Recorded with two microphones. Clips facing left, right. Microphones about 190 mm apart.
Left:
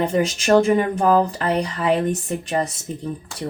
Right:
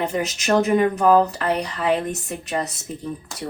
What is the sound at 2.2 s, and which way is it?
Speech, 30° left (ahead or behind).